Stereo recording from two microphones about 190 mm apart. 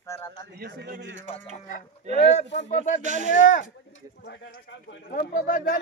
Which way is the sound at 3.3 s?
45° left (ahead or behind).